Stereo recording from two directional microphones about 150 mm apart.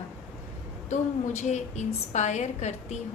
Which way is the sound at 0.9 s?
50° left (ahead or behind).